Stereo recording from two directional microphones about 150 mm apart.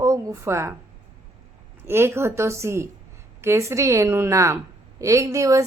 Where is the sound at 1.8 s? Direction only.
15° right (ahead or behind).